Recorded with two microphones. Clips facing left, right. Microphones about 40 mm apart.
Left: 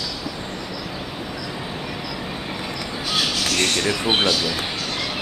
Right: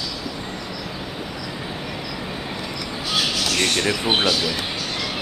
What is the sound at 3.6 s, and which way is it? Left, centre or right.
Speech, centre.